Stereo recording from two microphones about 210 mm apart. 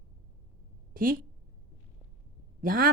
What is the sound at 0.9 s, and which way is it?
Speech, 45° right (ahead or behind).